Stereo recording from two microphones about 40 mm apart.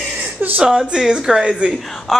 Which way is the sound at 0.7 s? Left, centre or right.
Centre.